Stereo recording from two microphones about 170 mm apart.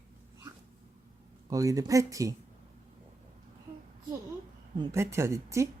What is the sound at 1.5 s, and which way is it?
Speech, 20° right (ahead or behind).